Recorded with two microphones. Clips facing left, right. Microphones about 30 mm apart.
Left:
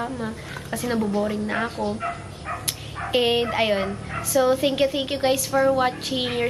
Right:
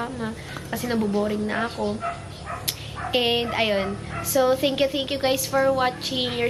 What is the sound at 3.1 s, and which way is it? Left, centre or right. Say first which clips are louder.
A woman's voice: left 2 dB; centre.